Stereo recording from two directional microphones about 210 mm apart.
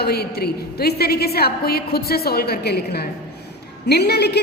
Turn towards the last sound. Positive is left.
turn(degrees=50)  # may be behind; listen again after turning